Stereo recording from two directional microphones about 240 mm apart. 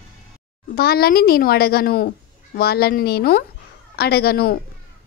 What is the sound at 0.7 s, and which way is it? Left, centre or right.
A woman's voice, left.